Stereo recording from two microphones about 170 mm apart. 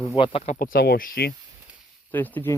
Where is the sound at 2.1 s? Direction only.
10° left (ahead or behind).